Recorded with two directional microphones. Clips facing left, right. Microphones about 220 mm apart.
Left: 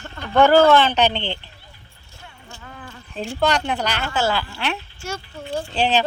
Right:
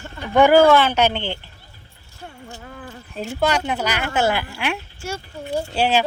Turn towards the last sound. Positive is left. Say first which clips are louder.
# right 1 dB
turn(degrees=-10)  # may be behind; listen again after turning